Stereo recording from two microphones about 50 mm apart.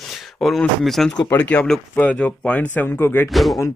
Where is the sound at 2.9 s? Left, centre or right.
Left.